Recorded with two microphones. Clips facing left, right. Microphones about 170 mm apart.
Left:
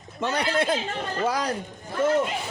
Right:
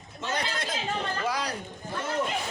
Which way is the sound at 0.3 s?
60° left (ahead or behind).